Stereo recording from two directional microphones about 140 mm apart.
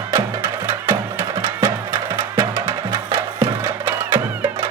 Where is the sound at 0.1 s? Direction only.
20° right (ahead or behind).